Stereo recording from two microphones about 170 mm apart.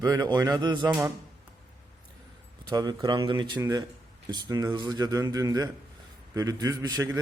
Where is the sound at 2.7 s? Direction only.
25° right (ahead or behind).